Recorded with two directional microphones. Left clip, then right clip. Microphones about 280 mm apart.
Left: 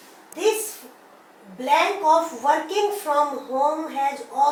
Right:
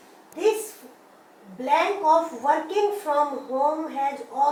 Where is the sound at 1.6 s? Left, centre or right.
Centre.